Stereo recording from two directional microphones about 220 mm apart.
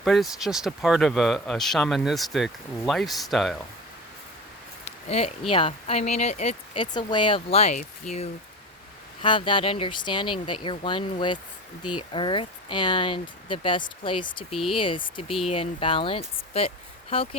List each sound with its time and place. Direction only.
0.0 s speech: centre (ahead or behind)
5.0 s speech: 30° left (ahead or behind)
11.8 s speech: 90° left
12.1 s speech: 25° left (ahead or behind)